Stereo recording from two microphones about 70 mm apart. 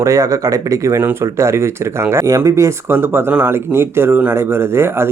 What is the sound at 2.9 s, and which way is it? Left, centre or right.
Speech, right.